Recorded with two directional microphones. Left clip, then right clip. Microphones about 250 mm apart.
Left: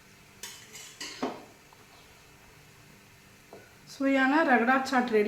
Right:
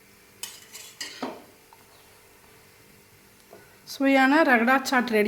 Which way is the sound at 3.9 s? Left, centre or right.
Right.